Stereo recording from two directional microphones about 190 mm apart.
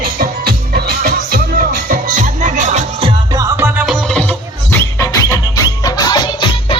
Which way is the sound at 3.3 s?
15° right (ahead or behind).